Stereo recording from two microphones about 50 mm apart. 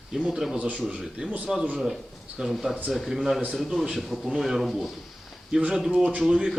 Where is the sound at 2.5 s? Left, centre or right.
Centre.